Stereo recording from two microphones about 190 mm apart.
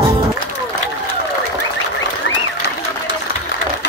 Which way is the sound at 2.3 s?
70° left (ahead or behind).